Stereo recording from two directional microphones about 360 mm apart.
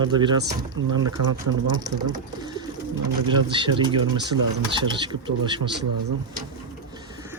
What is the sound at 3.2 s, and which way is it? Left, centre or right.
Speech, centre.